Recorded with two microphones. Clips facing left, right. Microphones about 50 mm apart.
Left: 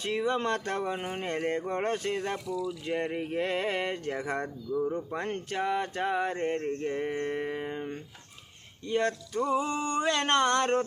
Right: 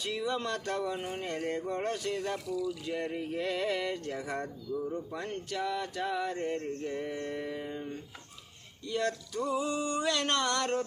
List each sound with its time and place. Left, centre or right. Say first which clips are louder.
0.0 s speech: left 4 dB; left